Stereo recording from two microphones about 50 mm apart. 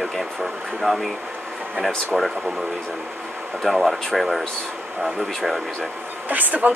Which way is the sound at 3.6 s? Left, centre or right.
Centre.